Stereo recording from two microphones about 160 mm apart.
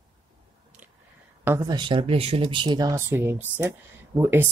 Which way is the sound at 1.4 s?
15° right (ahead or behind).